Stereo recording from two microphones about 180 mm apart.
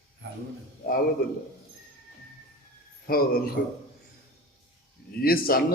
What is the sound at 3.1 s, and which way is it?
Speech, 55° left (ahead or behind).